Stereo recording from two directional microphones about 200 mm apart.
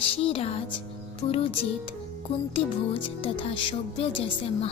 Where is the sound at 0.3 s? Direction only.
30° left (ahead or behind).